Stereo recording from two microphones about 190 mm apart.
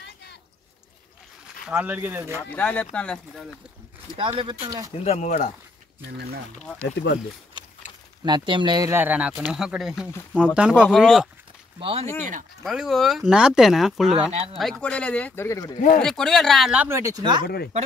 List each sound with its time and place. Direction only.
1.7 s speech: 5° right (ahead or behind)
2.4 s speech: 10° left (ahead or behind)
4.4 s speech: 20° right (ahead or behind)
5.0 s speech: 35° left (ahead or behind)
6.6 s speech: 5° left (ahead or behind)
8.2 s speech: 25° right (ahead or behind); by 11.2 s centre (ahead or behind)
11.8 s speech: 30° right (ahead or behind)
12.6 s speech: centre (ahead or behind)
14.3 s speech: 30° right (ahead or behind)
14.6 s speech: 5° left (ahead or behind)
16.0 s speech: 5° left (ahead or behind)
16.8 s speech: 15° right (ahead or behind)